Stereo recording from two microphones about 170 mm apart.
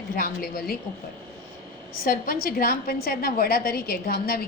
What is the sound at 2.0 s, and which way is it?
A woman's voice, 60° left (ahead or behind).